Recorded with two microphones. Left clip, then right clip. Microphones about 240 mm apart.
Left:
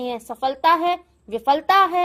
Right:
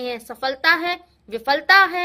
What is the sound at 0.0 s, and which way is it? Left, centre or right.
A woman's voice, centre.